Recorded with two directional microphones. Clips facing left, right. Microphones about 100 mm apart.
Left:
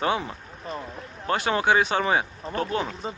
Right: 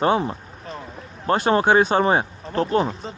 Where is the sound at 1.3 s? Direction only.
40° right (ahead or behind).